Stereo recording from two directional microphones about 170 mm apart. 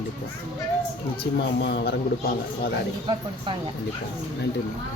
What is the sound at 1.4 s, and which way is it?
Speech, 75° left (ahead or behind).